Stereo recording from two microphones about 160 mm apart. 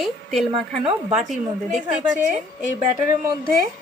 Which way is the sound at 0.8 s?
35° right (ahead or behind).